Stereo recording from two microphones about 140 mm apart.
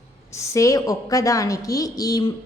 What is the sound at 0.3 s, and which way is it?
A woman's voice, 20° left (ahead or behind).